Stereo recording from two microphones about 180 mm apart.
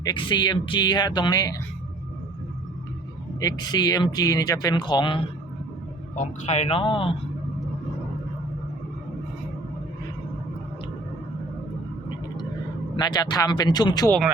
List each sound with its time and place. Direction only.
0.0 s speech: 25° left (ahead or behind)
3.4 s speech: 25° left (ahead or behind)
6.1 s speech: 40° left (ahead or behind)
13.0 s speech: 25° left (ahead or behind)